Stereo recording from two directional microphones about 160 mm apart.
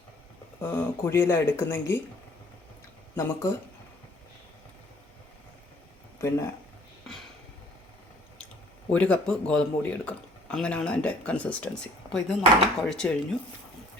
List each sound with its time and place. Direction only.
0.6 s a man's voice: 10° left (ahead or behind)
3.2 s a man's voice: 15° left (ahead or behind)
6.1 s a man's voice: 15° left (ahead or behind)
8.9 s a man's voice: 10° left (ahead or behind)